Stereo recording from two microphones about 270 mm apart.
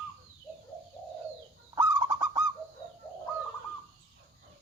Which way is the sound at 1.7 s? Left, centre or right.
Centre.